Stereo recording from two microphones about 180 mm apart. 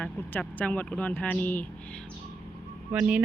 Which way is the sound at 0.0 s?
10° left (ahead or behind).